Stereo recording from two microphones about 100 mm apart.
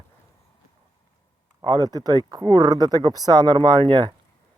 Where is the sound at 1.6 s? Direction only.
40° right (ahead or behind).